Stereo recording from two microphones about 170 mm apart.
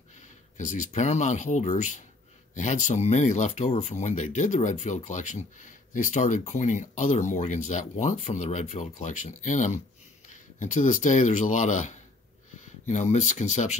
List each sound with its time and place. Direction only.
0.6 s speech: 45° left (ahead or behind)